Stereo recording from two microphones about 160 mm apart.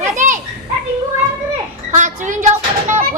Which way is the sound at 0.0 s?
50° right (ahead or behind).